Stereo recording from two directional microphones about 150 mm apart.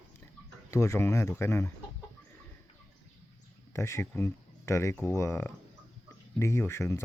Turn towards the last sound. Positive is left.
turn(degrees=20)  # may be behind; listen again after turning